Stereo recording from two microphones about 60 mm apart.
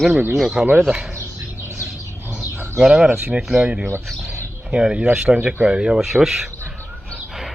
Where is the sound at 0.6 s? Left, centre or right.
Centre.